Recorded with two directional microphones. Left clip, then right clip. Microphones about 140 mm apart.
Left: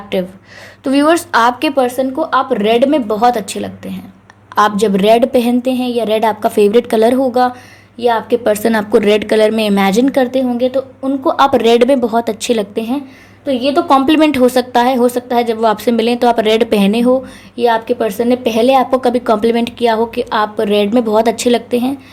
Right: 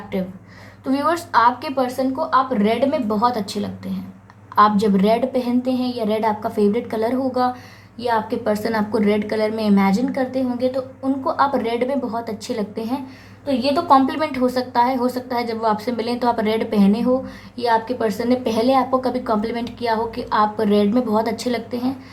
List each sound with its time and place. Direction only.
0.9 s a woman's voice: 40° left (ahead or behind)